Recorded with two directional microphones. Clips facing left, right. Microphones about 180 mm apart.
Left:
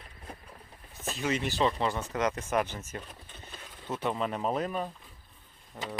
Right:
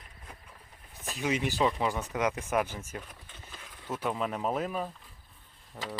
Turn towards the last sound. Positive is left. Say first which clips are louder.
# left 1 dB
turn(degrees=-5)  # may be behind; listen again after turning